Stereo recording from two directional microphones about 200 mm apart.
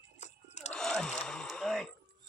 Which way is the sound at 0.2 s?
35° left (ahead or behind).